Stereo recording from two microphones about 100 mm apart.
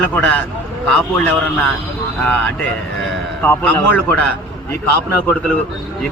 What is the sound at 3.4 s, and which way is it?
Speech, 20° left (ahead or behind).